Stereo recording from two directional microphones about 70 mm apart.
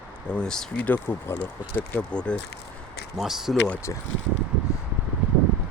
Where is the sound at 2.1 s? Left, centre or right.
Centre.